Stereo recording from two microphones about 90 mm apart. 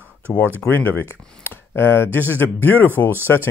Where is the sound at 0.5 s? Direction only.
20° left (ahead or behind).